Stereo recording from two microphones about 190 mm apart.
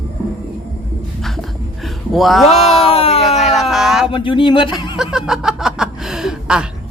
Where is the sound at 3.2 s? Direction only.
Centre (ahead or behind).